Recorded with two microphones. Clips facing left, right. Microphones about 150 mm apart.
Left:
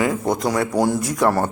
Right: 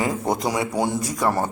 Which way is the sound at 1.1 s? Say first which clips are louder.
Left 4 dB; 10° right (ahead or behind).